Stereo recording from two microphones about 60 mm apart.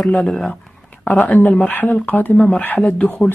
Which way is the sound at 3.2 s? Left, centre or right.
Left.